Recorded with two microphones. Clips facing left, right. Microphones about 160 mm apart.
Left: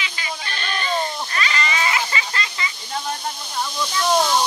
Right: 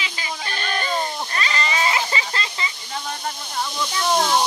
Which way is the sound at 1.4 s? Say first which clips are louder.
Even; 35° right (ahead or behind).